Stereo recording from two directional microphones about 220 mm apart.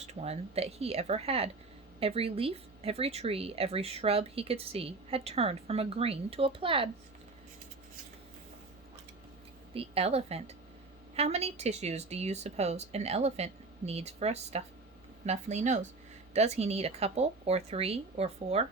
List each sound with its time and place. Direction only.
0.0 s speech: 30° right (ahead or behind)
9.7 s speech: 25° right (ahead or behind)